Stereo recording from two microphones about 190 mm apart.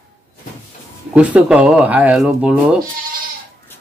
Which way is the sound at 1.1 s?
5° right (ahead or behind).